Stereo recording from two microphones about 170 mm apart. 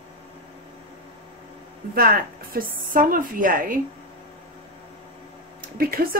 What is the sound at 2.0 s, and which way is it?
A woman's voice, 60° right (ahead or behind).